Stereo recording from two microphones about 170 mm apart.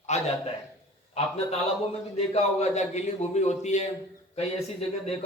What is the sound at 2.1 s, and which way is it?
A man's voice, 40° left (ahead or behind).